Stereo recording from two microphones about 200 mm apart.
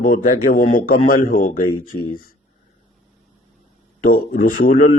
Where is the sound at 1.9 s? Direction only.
90° left.